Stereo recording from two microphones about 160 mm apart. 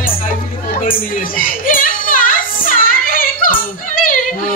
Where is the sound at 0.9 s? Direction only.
60° left (ahead or behind).